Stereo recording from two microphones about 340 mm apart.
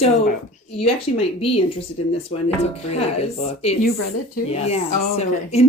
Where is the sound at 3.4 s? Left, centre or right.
Centre.